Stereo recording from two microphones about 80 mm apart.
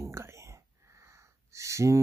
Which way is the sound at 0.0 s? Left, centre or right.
Right.